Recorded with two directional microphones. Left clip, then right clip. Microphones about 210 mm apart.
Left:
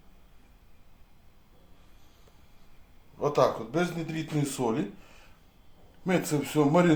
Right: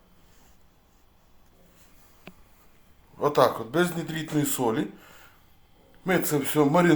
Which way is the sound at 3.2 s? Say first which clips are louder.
Right 3 dB; 20° right (ahead or behind).